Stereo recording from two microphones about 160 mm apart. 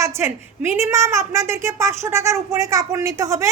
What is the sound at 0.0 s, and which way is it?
A woman's voice, 15° right (ahead or behind).